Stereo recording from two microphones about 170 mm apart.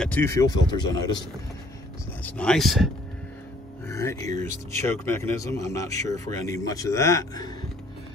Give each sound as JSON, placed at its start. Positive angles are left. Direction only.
{"t": 0.0, "sound": "speech", "side_deg": 10}
{"t": 2.2, "sound": "speech", "side_deg": 5}
{"t": 3.8, "sound": "speech", "side_deg": 15}